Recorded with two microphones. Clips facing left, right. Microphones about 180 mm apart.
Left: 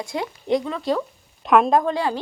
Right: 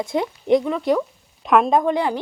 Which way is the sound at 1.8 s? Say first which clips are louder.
Right 3 dB; 20° right (ahead or behind).